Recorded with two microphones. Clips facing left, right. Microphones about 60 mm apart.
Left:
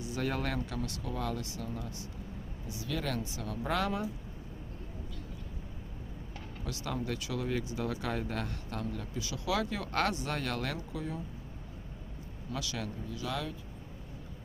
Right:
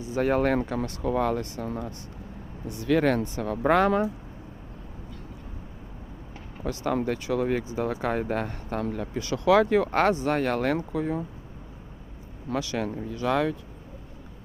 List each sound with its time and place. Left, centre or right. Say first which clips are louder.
0.0 s speech: right 10 dB; right
2.6 s speech: right 14 dB; right
6.6 s speech: right 10 dB; right
12.5 s speech: right 10 dB; right